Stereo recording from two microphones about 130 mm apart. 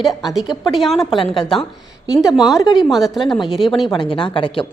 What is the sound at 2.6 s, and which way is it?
Speech, 35° left (ahead or behind).